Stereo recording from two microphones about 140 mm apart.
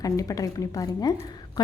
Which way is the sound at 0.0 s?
25° left (ahead or behind).